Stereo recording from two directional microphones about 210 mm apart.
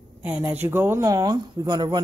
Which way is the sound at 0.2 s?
10° right (ahead or behind).